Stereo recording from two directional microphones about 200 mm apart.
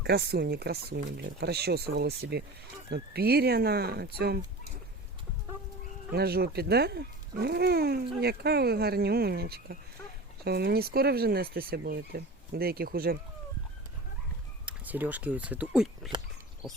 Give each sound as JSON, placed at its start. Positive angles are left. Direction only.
{"t": 0.0, "sound": "speech", "side_deg": -55}
{"t": 6.1, "sound": "speech", "side_deg": -50}
{"t": 14.7, "sound": "speech", "side_deg": -10}